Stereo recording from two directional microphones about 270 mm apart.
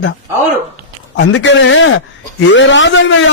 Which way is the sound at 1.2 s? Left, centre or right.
Left.